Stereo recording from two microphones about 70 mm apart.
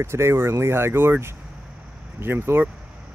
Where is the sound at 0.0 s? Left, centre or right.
Right.